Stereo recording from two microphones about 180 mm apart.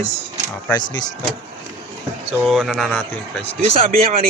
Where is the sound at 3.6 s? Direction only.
35° right (ahead or behind).